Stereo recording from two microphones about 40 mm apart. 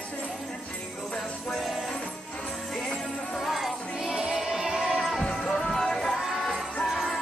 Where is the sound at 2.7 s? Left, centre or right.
Centre.